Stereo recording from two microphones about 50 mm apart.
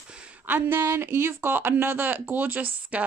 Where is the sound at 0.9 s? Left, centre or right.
Right.